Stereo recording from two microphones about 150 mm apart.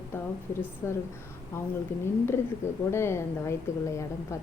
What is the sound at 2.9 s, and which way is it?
A woman's voice, 15° left (ahead or behind).